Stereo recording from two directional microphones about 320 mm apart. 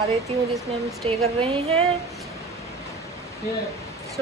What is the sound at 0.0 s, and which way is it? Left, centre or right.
A woman's voice, centre.